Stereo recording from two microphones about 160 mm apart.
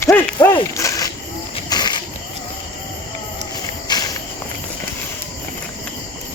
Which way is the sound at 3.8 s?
25° left (ahead or behind).